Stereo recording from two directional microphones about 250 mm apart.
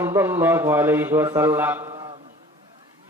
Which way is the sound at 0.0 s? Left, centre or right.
Centre.